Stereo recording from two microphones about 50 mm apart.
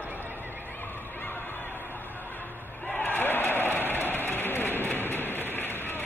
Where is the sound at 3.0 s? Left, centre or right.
Left.